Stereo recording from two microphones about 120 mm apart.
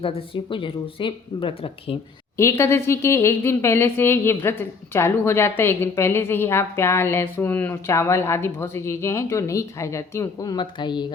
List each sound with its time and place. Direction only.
0.0 s speech: 45° left (ahead or behind)
2.4 s speech: 20° left (ahead or behind); by 11.0 s 40° left (ahead or behind)